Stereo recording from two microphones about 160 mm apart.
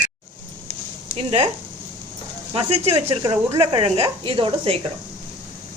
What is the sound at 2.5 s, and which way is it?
A woman's voice, 40° right (ahead or behind).